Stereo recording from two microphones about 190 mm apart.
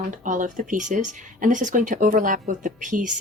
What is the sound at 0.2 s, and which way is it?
Speech, 45° right (ahead or behind).